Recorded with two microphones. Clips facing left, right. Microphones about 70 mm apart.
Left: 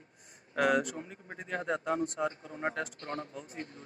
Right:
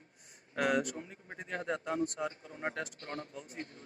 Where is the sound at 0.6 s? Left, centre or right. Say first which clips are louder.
Left 3 dB; left.